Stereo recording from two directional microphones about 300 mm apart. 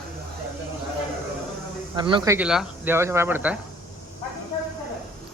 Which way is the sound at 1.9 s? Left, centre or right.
Centre.